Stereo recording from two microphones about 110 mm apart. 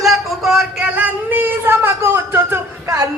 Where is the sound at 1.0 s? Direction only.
15° right (ahead or behind).